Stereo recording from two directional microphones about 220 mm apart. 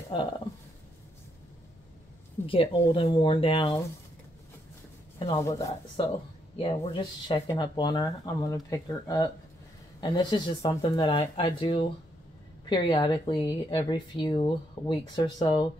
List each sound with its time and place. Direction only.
0.1 s speech: 20° left (ahead or behind)
2.4 s speech: 25° left (ahead or behind)
5.4 s speech: 15° left (ahead or behind)
6.6 s speech: 25° left (ahead or behind)